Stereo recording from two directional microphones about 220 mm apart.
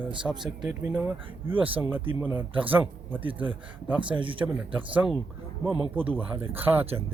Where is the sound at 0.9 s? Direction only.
5° right (ahead or behind).